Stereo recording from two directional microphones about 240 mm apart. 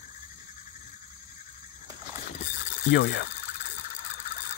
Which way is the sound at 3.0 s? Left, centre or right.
Left.